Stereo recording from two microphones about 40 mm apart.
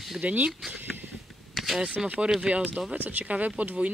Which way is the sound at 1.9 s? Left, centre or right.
Right.